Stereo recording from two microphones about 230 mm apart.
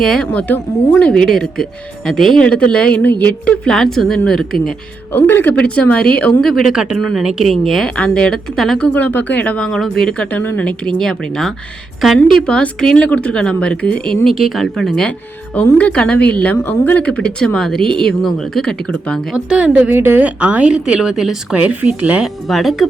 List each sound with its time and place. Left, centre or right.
0.0 s a woman's voice: centre